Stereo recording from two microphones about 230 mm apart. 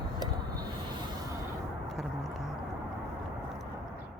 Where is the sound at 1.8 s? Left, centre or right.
Centre.